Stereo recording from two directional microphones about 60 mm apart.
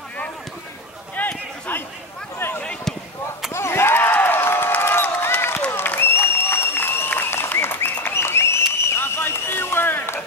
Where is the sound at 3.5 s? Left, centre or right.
Left.